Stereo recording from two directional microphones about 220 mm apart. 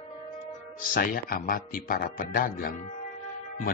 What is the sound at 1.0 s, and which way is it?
Speech, 40° left (ahead or behind).